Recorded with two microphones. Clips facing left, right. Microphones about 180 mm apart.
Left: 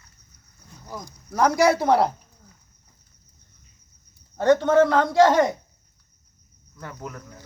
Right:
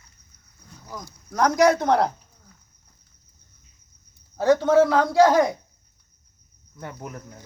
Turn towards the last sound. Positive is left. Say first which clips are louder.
# right 1 dB
turn(degrees=-25)  # may be behind; listen again after turning